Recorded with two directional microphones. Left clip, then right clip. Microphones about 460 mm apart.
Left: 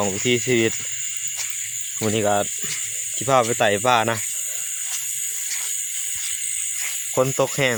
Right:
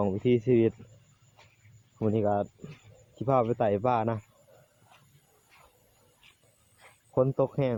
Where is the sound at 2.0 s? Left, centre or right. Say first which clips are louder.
Left 7 dB; right.